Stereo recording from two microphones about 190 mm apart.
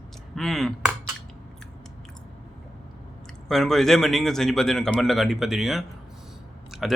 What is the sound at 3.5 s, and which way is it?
A man's voice, centre (ahead or behind).